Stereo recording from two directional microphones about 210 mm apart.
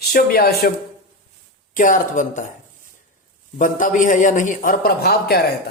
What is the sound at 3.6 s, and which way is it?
Speech, 40° left (ahead or behind).